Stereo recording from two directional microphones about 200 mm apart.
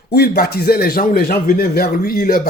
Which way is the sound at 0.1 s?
50° left (ahead or behind).